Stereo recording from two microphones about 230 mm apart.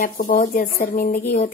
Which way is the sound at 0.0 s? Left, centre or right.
Left.